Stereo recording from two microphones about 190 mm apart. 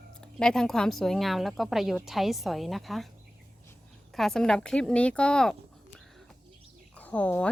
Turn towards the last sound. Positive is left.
turn(degrees=5)  # may be behind; listen again after turning